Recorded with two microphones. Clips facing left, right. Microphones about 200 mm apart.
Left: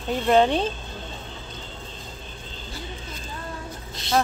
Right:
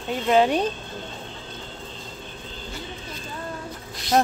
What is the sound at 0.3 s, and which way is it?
Speech, 10° right (ahead or behind).